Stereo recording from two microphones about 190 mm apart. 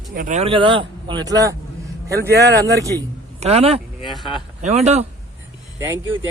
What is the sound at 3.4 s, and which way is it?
Speech, 35° right (ahead or behind).